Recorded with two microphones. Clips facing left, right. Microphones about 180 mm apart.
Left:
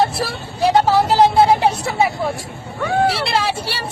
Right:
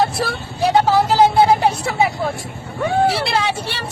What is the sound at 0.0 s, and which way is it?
Vehicle, centre (ahead or behind).